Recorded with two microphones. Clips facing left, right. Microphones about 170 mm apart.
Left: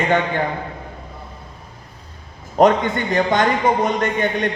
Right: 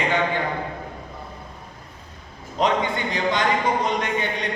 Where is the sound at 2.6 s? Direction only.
50° left (ahead or behind).